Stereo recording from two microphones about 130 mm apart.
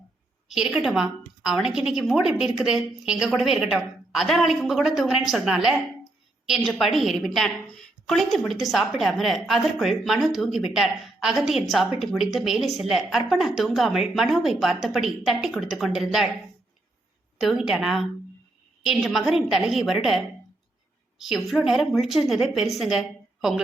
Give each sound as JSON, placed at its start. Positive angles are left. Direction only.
{"t": 0.4, "sound": "a woman's voice", "side_deg": -5}
{"t": 17.4, "sound": "a woman's voice", "side_deg": -5}